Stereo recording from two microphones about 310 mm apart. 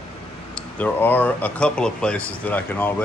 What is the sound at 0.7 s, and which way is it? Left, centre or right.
Speech, centre.